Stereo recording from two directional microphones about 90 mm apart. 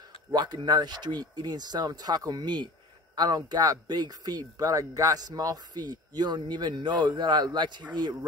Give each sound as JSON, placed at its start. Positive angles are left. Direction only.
{"t": 0.3, "sound": "speech", "side_deg": -55}